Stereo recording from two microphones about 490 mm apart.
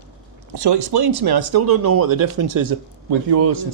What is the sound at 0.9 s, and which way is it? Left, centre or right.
Speech, right.